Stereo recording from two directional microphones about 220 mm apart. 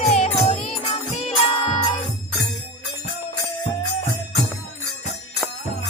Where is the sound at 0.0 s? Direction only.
30° left (ahead or behind).